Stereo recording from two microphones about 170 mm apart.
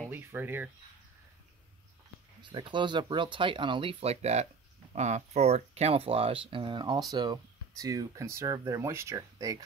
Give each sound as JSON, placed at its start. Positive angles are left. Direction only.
{"t": 0.1, "sound": "speech", "side_deg": -10}
{"t": 2.4, "sound": "speech", "side_deg": -30}